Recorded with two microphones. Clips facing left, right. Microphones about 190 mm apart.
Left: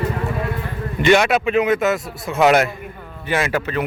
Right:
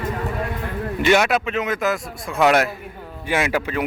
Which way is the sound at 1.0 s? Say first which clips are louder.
Left 3 dB; 5° right (ahead or behind).